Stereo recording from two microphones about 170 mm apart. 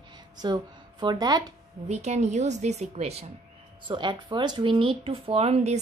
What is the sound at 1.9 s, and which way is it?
A woman's voice, 40° right (ahead or behind).